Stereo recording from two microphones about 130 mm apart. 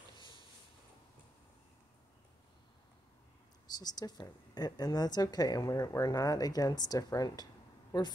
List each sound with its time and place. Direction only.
3.6 s a woman's voice: 30° left (ahead or behind)